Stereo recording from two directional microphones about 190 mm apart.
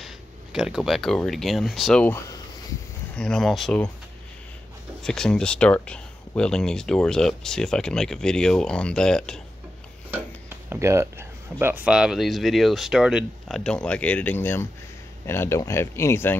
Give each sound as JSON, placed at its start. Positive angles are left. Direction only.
{"t": 0.0, "sound": "speech", "side_deg": -5}
{"t": 3.2, "sound": "speech", "side_deg": 5}
{"t": 5.0, "sound": "speech", "side_deg": 5}
{"t": 10.1, "sound": "speech", "side_deg": -10}